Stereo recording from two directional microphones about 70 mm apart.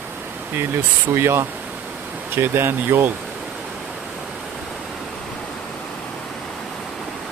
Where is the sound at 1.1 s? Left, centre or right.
Right.